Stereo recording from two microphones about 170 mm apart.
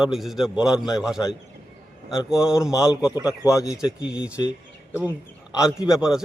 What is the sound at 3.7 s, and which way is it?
Speech, 5° right (ahead or behind).